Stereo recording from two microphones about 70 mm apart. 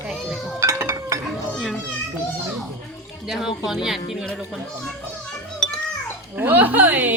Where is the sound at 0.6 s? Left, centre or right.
Right.